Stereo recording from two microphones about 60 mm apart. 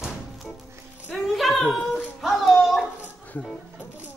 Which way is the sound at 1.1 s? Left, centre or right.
Centre.